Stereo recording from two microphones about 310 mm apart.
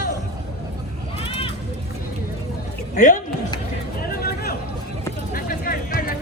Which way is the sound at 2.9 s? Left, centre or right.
Left.